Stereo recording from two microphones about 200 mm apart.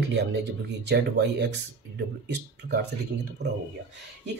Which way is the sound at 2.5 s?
60° right (ahead or behind).